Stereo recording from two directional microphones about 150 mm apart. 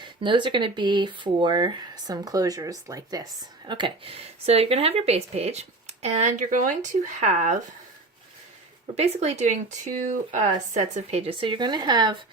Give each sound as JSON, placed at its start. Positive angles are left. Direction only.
{"t": 0.0, "sound": "speech", "side_deg": -30}
{"t": 9.0, "sound": "speech", "side_deg": -45}